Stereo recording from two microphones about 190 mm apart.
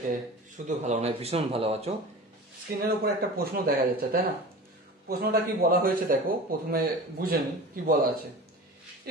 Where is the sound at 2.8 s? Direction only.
55° right (ahead or behind).